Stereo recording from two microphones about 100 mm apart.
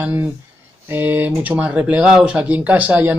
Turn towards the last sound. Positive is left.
turn(degrees=-15)  # may be behind; listen again after turning